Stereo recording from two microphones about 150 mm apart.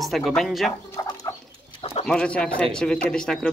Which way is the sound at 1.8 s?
40° left (ahead or behind).